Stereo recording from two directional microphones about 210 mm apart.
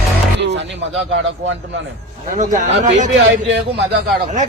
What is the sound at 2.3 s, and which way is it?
Speech, 35° right (ahead or behind).